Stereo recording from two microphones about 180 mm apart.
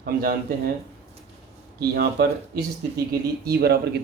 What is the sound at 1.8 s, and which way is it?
Speech, 60° right (ahead or behind).